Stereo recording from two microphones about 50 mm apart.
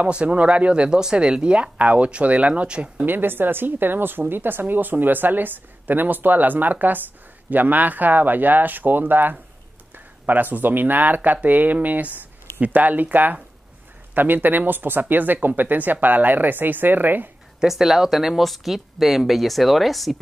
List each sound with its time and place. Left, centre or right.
0.1 s speech: right
3.1 s speech: right
17.6 s speech: centre